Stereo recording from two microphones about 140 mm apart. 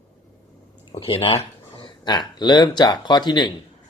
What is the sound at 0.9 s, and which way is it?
Speech, 40° left (ahead or behind).